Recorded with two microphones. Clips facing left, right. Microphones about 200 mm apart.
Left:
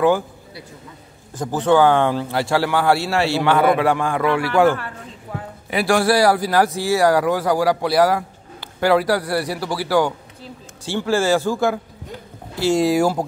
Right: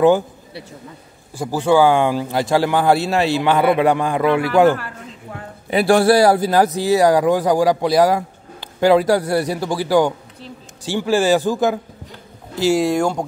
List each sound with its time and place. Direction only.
0.0 s a man's voice: 25° right (ahead or behind)
1.3 s speech: 10° right (ahead or behind)
5.7 s speech: 25° right (ahead or behind)
12.7 s speech: 5° left (ahead or behind)